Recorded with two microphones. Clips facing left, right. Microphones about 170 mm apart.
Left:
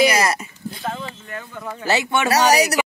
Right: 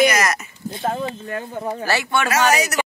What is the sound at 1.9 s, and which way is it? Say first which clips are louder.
Speech: left 3 dB; 20° left (ahead or behind).